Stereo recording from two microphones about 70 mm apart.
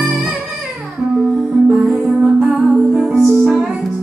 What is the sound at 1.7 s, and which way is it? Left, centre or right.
Music, centre.